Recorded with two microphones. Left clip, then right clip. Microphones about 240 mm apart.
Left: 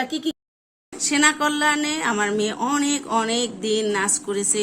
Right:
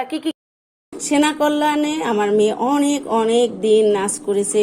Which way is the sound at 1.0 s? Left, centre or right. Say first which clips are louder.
Right 2 dB; centre.